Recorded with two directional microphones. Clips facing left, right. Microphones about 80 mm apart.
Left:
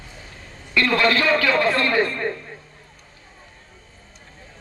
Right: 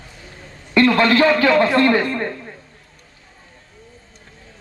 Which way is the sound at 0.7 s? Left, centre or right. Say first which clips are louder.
Right 5 dB; right.